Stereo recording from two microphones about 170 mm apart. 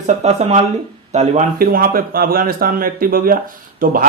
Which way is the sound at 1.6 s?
60° right (ahead or behind).